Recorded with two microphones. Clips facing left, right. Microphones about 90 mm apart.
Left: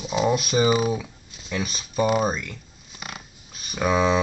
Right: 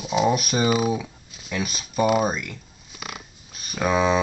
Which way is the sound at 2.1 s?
15° right (ahead or behind).